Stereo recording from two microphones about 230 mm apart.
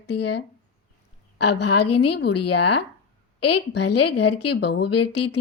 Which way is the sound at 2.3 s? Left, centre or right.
Left.